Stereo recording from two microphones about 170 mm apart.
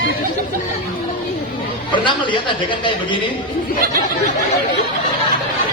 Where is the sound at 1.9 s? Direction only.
30° left (ahead or behind).